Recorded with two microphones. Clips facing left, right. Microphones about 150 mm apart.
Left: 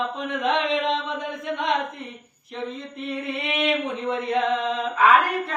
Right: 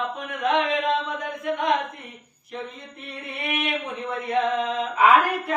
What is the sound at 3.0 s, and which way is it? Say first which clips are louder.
Chant: left 5 dB; 20° left (ahead or behind).